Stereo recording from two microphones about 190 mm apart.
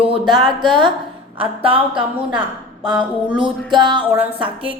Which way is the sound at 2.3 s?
5° right (ahead or behind).